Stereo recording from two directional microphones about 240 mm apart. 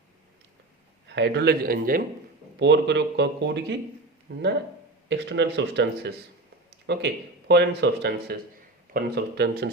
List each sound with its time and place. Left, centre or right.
1.0 s speech: right